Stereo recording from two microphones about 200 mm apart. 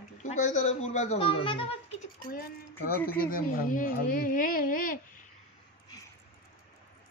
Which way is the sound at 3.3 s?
45° left (ahead or behind).